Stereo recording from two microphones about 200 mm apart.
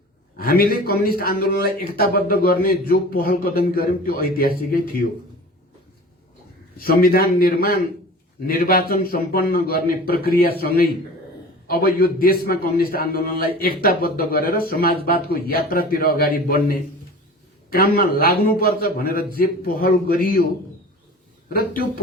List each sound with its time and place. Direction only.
0.3 s a man's voice: 50° left (ahead or behind)
6.7 s a man's voice: 45° left (ahead or behind)
21.5 s a man's voice: 45° left (ahead or behind)